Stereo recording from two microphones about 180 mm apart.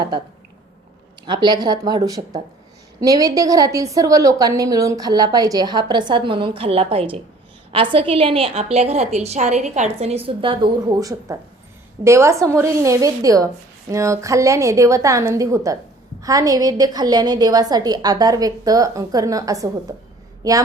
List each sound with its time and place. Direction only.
1.3 s a woman's voice: 25° right (ahead or behind)